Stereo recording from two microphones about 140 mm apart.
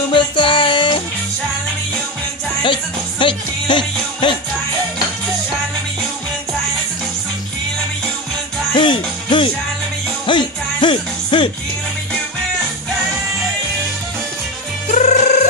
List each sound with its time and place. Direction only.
0.1 s music: 35° left (ahead or behind)
2.6 s music: 35° left (ahead or behind)
8.7 s music: 35° left (ahead or behind)
14.9 s music: 55° left (ahead or behind)